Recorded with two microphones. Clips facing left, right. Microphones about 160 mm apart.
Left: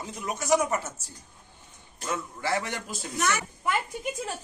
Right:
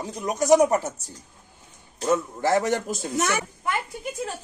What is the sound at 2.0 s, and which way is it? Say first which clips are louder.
A man's voice: right 9 dB; 40° right (ahead or behind).